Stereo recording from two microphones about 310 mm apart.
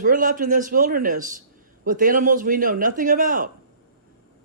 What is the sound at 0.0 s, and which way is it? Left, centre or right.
A man's voice, right.